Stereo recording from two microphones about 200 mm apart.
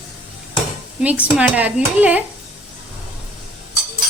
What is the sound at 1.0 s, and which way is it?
Speech, 5° right (ahead or behind).